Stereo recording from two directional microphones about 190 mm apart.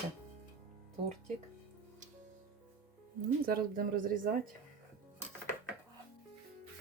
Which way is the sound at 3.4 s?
50° right (ahead or behind).